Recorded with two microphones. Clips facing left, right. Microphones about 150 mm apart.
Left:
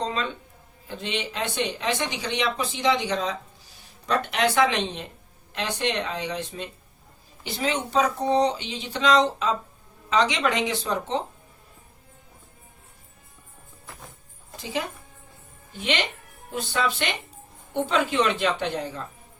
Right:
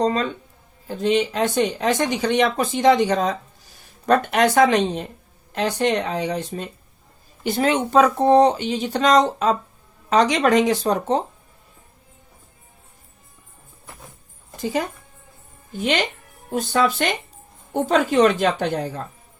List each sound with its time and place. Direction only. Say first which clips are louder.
0.0 s speech: right 8 dB; 45° right (ahead or behind)
14.6 s speech: right 6 dB; 45° right (ahead or behind)